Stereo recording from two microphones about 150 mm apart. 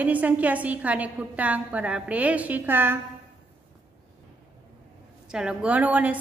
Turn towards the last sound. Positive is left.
turn(degrees=-10)  # may be behind; listen again after turning